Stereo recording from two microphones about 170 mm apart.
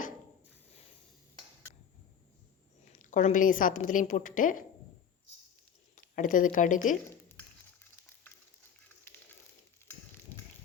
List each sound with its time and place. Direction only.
2.9 s a woman's voice: 50° left (ahead or behind)
6.1 s a woman's voice: 50° left (ahead or behind)